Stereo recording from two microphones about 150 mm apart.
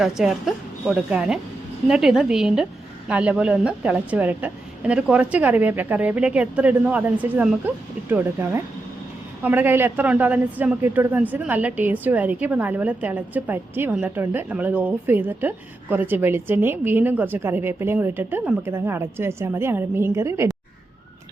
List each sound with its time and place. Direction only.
0.0 s a woman's voice: centre (ahead or behind); by 20.5 s 20° right (ahead or behind)